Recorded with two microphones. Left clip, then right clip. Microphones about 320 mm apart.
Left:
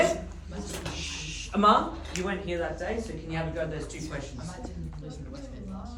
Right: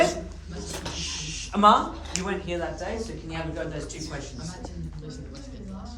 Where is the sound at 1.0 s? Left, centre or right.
Right.